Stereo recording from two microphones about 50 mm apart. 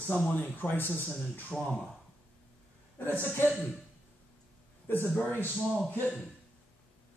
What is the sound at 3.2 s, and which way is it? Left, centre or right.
Speech, left.